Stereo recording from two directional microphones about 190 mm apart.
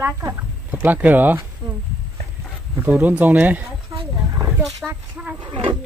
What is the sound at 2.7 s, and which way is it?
Speech, 10° right (ahead or behind).